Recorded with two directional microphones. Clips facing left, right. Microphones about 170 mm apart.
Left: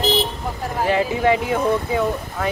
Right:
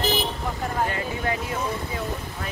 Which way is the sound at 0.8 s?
90° left.